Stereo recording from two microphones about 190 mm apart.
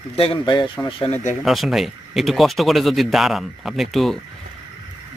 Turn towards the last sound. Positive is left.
turn(degrees=0)  # may be behind; listen again after turning